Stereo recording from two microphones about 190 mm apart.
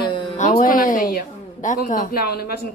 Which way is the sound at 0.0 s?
25° left (ahead or behind).